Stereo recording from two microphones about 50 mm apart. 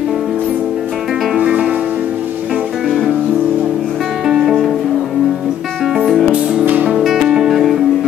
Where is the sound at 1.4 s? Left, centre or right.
Right.